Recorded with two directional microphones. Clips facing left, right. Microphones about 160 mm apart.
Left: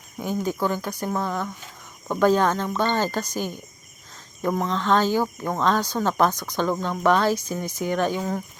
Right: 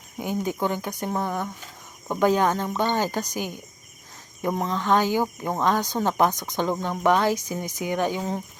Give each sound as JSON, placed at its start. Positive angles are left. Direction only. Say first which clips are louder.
{"t": 0.2, "sound": "speech", "louder": "left 1 dB", "side_deg": -20}
{"t": 4.7, "sound": "speech", "louder": "even", "side_deg": -15}